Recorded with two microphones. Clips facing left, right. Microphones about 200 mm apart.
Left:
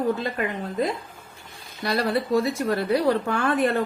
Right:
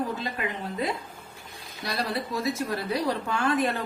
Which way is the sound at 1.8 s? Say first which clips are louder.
Left 7 dB; 60° left (ahead or behind).